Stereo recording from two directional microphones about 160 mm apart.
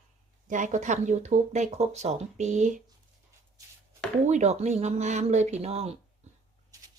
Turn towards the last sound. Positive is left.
turn(degrees=-40)  # may be behind; listen again after turning